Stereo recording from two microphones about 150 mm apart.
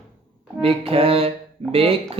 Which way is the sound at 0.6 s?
40° right (ahead or behind).